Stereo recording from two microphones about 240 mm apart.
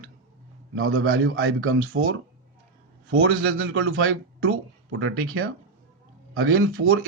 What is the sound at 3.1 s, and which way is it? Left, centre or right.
A man's voice, right.